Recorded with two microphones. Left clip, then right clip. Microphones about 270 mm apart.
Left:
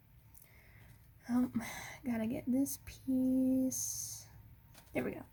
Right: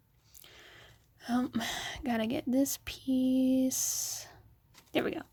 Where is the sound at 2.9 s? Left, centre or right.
Right.